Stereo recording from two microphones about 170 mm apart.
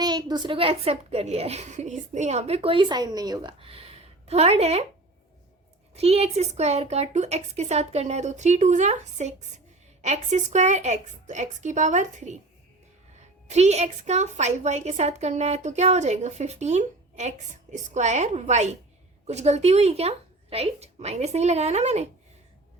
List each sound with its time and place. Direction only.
0.0 s a woman's voice: 25° right (ahead or behind)
5.9 s a woman's voice: 35° right (ahead or behind)
13.5 s a woman's voice: 40° right (ahead or behind)